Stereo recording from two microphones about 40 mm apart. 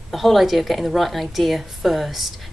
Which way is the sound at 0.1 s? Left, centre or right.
Centre.